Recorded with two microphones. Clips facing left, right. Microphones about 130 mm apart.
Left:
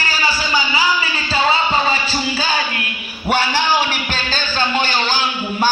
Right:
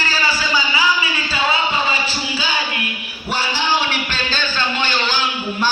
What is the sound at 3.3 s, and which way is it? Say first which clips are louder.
Speech: left 5 dB; 55° left (ahead or behind).